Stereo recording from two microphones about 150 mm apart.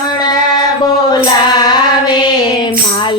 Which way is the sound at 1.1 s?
30° left (ahead or behind).